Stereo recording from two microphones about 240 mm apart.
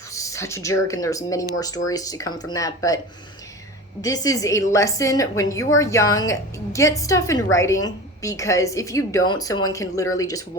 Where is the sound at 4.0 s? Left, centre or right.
Centre.